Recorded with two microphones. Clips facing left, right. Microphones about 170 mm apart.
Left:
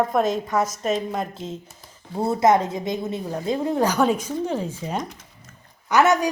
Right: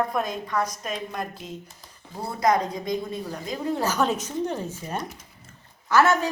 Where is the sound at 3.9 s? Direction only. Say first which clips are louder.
Left 4 dB; 10° left (ahead or behind).